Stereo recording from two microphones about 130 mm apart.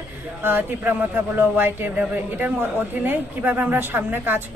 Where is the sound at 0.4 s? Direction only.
15° right (ahead or behind).